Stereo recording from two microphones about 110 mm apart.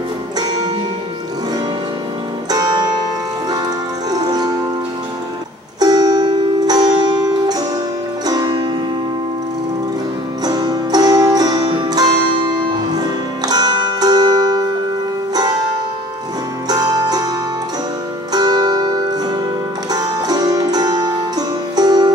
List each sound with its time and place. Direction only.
2.5 s music: 40° right (ahead or behind)
4.1 s music: 35° right (ahead or behind)
5.8 s music: 40° right (ahead or behind)
10.4 s music: 40° right (ahead or behind)
16.6 s music: 40° right (ahead or behind)
18.3 s music: 40° right (ahead or behind)